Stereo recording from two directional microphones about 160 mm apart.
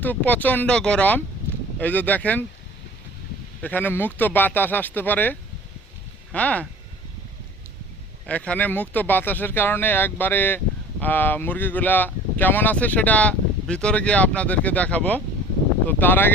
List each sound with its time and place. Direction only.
0.0 s speech: 10° left (ahead or behind)
3.6 s speech: 10° left (ahead or behind)
8.3 s speech: 10° left (ahead or behind)